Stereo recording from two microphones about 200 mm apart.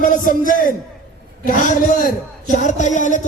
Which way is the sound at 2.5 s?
35° left (ahead or behind).